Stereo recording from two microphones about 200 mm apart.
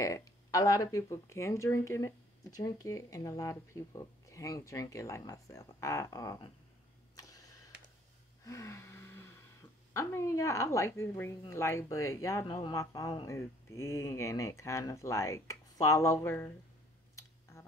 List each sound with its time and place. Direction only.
0.0 s speech: 15° left (ahead or behind)
7.2 s a sound: 15° left (ahead or behind)
8.5 s gasp: 15° left (ahead or behind)
9.9 s speech: 15° left (ahead or behind)
17.1 s clicking: 15° left (ahead or behind)